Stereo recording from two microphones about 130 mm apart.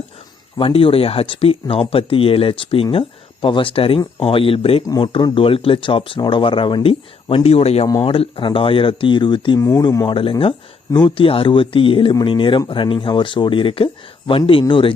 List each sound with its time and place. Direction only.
0.5 s speech: 45° left (ahead or behind)
9.6 s speech: 25° left (ahead or behind)
10.2 s speech: 40° left (ahead or behind)